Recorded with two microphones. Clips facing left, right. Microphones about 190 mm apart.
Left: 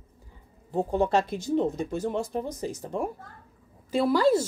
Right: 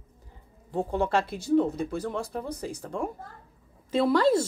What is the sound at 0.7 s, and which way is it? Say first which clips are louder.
Speech: left 2 dB; 20° left (ahead or behind).